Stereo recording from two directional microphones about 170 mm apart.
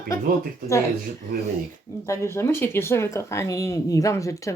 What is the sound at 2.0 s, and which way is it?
Speech, 15° left (ahead or behind).